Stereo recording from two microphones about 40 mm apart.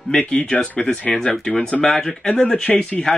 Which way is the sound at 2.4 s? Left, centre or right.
Left.